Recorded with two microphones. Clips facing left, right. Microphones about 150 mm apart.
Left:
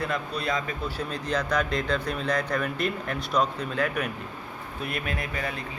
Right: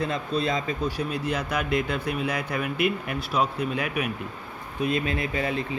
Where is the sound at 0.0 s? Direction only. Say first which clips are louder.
Right 3 dB; 25° right (ahead or behind).